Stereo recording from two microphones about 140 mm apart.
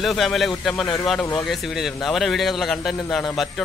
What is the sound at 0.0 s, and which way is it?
A man's voice, centre (ahead or behind).